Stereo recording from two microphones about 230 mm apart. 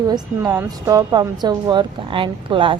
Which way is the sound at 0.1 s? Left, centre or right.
Centre.